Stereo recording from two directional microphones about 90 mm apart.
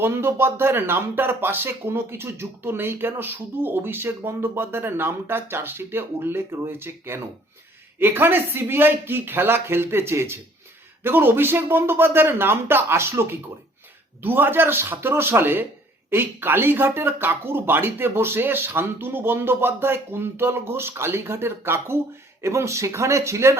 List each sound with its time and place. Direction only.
0.0 s speech: 25° right (ahead or behind)